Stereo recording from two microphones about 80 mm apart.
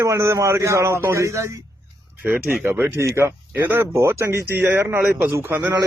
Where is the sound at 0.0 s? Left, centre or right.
Right.